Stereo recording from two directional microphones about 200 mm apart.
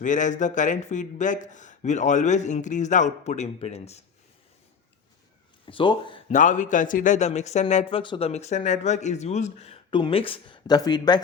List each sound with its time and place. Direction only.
0.0 s speech: 40° left (ahead or behind)
5.6 s speech: 25° left (ahead or behind)
6.3 s speech: 40° left (ahead or behind); by 11.2 s 20° left (ahead or behind)